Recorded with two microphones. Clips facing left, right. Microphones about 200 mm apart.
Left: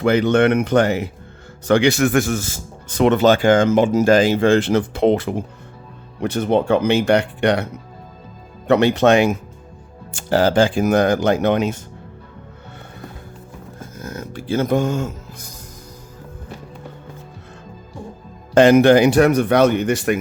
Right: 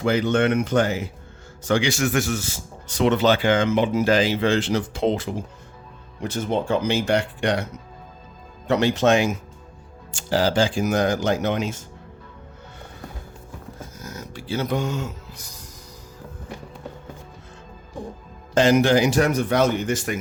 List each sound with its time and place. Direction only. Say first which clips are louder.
0.0 s speech: left 5 dB; 60° left (ahead or behind)
13.7 s music: left 7 dB; 55° left (ahead or behind)
18.5 s speech: left 6 dB; 60° left (ahead or behind)